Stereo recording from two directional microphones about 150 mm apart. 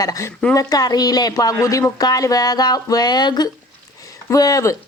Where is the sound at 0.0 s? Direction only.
25° left (ahead or behind).